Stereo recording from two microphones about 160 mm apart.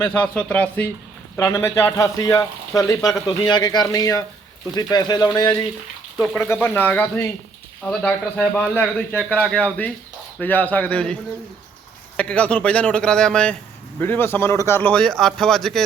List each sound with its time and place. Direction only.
0.0 s a man's voice: 10° left (ahead or behind)
1.4 s speech: 20° left (ahead or behind)
6.3 s a man's voice: 10° left (ahead or behind)